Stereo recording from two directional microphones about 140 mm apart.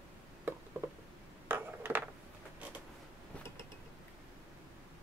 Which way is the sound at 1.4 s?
15° right (ahead or behind).